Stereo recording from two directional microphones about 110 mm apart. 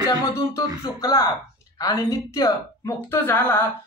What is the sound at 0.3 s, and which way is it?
A woman's voice, 30° left (ahead or behind).